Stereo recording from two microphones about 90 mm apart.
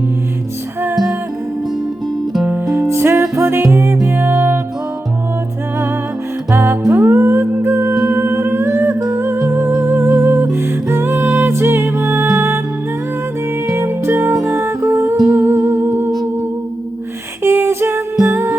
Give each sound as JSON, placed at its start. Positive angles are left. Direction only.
{"t": 2.6, "sound": "music", "side_deg": -35}
{"t": 6.5, "sound": "music", "side_deg": -25}
{"t": 9.0, "sound": "humming", "side_deg": -40}
{"t": 9.5, "sound": "music", "side_deg": -25}
{"t": 13.7, "sound": "music", "side_deg": -30}
{"t": 15.3, "sound": "humming", "side_deg": -30}
{"t": 17.4, "sound": "music", "side_deg": -25}